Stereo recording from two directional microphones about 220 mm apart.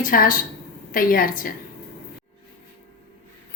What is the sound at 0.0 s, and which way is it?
A woman's voice, 40° left (ahead or behind).